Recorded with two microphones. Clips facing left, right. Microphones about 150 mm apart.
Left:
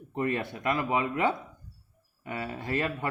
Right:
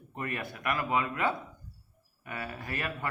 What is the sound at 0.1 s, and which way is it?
A man's voice, 25° left (ahead or behind).